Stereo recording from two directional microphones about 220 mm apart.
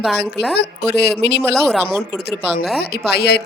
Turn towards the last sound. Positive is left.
turn(degrees=45)  # may be behind; listen again after turning